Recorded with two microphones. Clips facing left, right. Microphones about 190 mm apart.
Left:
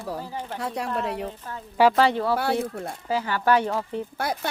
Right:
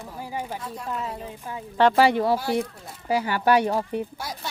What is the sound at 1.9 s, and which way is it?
Speech, 10° right (ahead or behind).